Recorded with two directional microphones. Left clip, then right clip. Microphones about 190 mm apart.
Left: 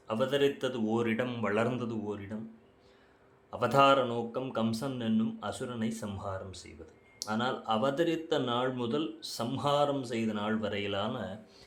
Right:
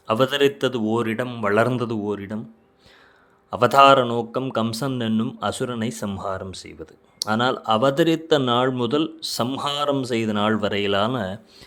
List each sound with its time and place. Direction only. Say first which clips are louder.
0.1 s speech: right 10 dB; 45° right (ahead or behind)
3.5 s speech: right 11 dB; 40° right (ahead or behind)